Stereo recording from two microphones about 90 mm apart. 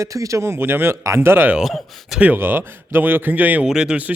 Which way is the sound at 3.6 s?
5° right (ahead or behind).